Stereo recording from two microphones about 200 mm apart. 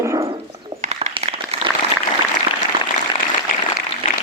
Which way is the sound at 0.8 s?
35° right (ahead or behind).